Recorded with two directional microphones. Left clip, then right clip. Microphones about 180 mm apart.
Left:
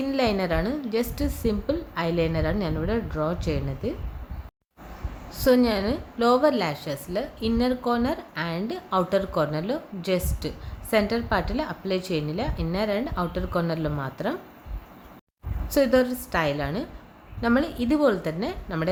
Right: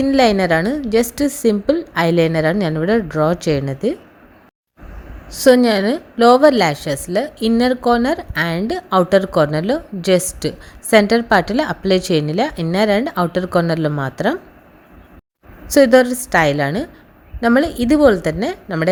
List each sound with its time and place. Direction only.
0.0 s a woman's voice: 40° right (ahead or behind)
5.3 s a woman's voice: 40° right (ahead or behind)
15.6 s a woman's voice: 40° right (ahead or behind)